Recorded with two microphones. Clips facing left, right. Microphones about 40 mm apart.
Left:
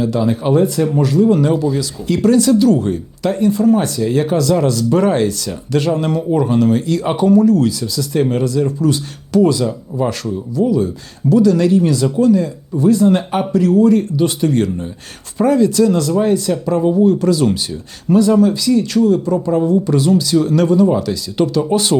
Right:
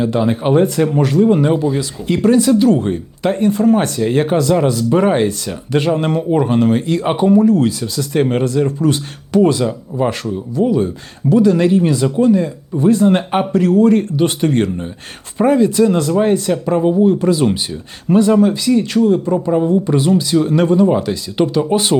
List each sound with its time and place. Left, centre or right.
0.0 s speech: right